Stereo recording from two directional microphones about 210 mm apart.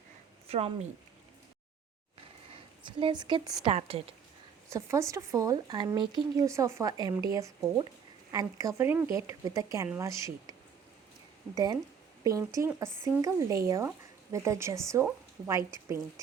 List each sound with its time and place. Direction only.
0.4 s speech: 30° right (ahead or behind)
2.8 s speech: 20° right (ahead or behind)
4.7 s speech: 15° right (ahead or behind)
11.5 s a woman's voice: 20° right (ahead or behind)